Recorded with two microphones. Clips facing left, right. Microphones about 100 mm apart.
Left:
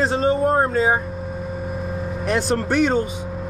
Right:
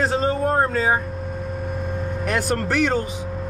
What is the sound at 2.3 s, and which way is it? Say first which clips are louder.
Speech: left 2 dB; centre (ahead or behind).